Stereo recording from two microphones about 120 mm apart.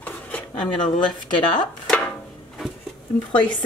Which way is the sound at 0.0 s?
10° left (ahead or behind).